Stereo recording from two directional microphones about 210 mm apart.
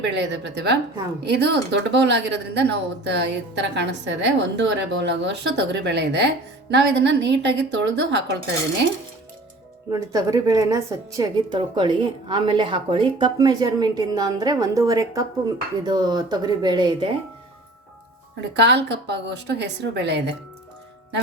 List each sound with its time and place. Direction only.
0.0 s speech: 55° right (ahead or behind)
9.9 s a woman's voice: 15° right (ahead or behind)
18.3 s speech: 55° right (ahead or behind)